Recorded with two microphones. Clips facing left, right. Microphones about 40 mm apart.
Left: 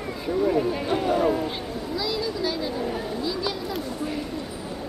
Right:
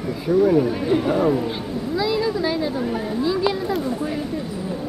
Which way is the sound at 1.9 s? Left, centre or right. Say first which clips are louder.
Right 7 dB; centre.